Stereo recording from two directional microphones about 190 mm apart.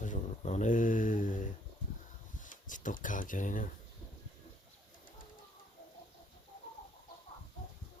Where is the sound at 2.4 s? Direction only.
45° left (ahead or behind).